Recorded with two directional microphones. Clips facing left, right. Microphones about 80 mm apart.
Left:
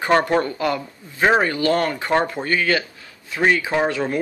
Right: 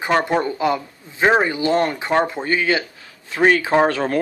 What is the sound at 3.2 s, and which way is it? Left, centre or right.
Speech, right.